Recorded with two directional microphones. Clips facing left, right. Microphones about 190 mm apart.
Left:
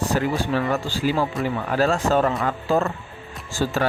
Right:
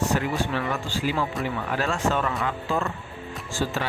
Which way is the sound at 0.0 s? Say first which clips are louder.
Left 2 dB; 35° left (ahead or behind).